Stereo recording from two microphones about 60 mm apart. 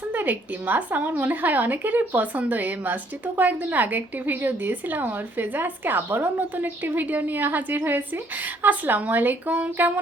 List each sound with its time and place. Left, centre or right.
0.1 s a woman's voice: right